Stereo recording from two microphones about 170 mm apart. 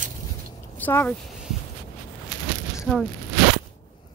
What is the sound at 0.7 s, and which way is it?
Speech, 10° left (ahead or behind).